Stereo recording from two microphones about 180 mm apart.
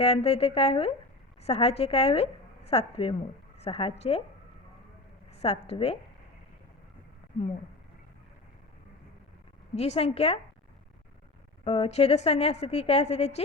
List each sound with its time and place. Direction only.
0.0 s a woman's voice: 35° left (ahead or behind)
5.3 s a woman's voice: 35° left (ahead or behind)
9.7 s a woman's voice: 35° left (ahead or behind)
11.6 s a woman's voice: 35° left (ahead or behind)